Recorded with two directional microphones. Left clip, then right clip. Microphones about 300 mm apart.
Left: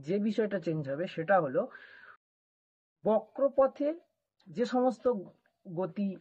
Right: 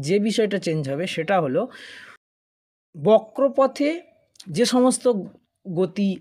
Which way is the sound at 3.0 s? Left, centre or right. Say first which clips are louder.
Right 11 dB; right.